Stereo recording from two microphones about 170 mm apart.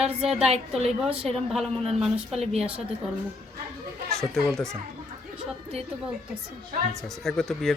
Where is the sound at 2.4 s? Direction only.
40° right (ahead or behind).